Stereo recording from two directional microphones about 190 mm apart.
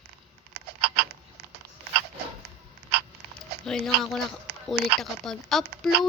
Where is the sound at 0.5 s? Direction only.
55° right (ahead or behind).